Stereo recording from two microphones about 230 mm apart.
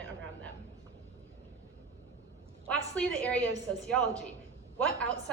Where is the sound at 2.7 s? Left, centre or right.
Centre.